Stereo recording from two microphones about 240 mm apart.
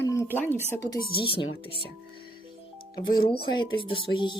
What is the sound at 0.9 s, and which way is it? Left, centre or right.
Speech, left.